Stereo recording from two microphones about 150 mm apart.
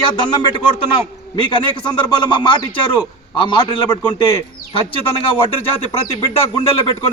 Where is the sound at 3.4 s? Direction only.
35° left (ahead or behind).